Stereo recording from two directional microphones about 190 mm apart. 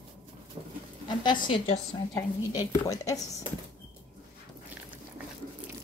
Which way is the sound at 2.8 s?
15° left (ahead or behind).